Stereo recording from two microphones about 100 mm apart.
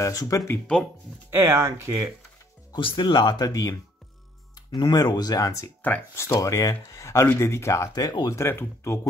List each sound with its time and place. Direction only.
0.0 s speech: 35° left (ahead or behind)
1.3 s speech: 25° right (ahead or behind)
2.8 s speech: 55° left (ahead or behind); by 5.7 s 35° left (ahead or behind)
5.8 s speech: 15° left (ahead or behind)
6.2 s speech: 30° left (ahead or behind)